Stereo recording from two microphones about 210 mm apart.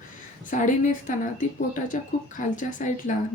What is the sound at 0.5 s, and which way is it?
Speech, 40° left (ahead or behind).